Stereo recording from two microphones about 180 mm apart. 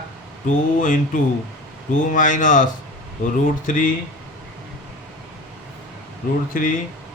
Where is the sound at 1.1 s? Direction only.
50° left (ahead or behind).